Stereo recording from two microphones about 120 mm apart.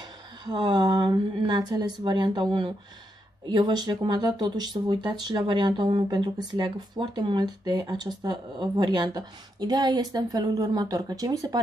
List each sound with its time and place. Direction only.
0.5 s speech: 40° right (ahead or behind)